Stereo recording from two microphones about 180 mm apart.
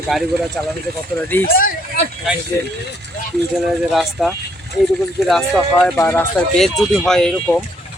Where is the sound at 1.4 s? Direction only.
55° left (ahead or behind).